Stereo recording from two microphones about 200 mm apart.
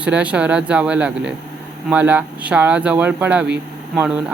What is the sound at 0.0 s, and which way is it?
Speech, 5° right (ahead or behind).